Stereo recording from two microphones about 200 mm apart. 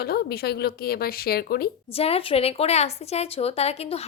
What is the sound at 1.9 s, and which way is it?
A woman's voice, 30° left (ahead or behind).